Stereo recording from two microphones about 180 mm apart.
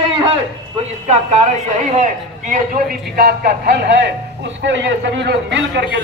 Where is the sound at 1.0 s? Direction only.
40° right (ahead or behind).